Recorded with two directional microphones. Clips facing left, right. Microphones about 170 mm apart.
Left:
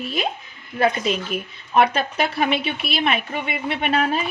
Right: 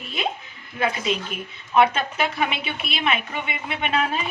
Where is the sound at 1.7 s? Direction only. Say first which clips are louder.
Left 1 dB; 40° left (ahead or behind).